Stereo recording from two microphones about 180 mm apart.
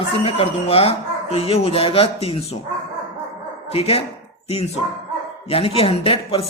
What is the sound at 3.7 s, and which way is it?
Speech, 35° left (ahead or behind).